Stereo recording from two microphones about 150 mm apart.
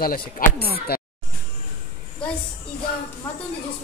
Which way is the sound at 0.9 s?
90° left.